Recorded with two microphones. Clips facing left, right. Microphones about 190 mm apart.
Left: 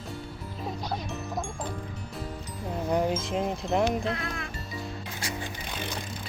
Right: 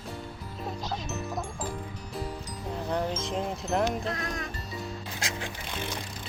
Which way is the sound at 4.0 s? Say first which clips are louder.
Left 1 dB; 40° right (ahead or behind).